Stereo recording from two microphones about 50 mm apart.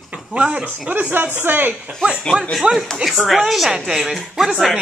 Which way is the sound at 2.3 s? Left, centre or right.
Centre.